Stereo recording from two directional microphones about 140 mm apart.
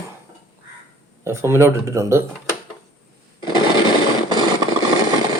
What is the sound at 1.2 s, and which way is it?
Speech, 20° right (ahead or behind).